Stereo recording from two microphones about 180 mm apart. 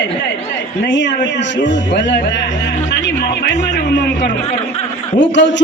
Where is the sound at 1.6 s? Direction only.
80° left.